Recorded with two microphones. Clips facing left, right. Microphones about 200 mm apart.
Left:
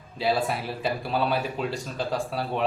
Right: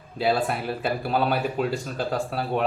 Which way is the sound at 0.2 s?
Centre (ahead or behind).